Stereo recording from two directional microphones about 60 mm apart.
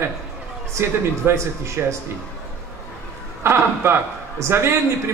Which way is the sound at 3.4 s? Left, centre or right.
Right.